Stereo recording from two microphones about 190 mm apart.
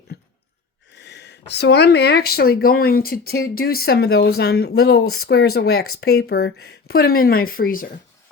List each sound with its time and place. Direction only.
0.1 s sigh: 60° left (ahead or behind)
0.9 s speech: 65° left (ahead or behind); by 7.9 s 50° left (ahead or behind)